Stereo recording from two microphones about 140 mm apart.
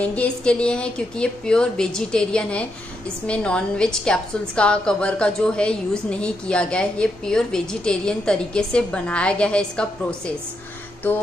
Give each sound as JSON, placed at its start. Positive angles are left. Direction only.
{"t": 0.0, "sound": "a woman's voice", "side_deg": 10}